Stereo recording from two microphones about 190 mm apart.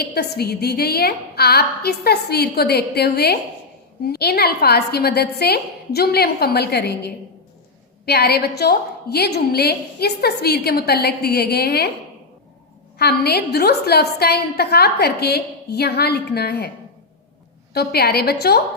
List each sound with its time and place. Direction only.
0.0 s a woman's voice: 55° left (ahead or behind)
13.0 s a woman's voice: 60° left (ahead or behind)
17.7 s a woman's voice: 55° left (ahead or behind)